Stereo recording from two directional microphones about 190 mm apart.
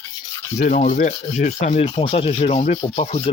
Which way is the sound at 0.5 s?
40° left (ahead or behind).